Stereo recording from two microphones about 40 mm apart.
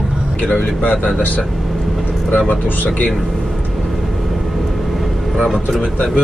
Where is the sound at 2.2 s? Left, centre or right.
Left.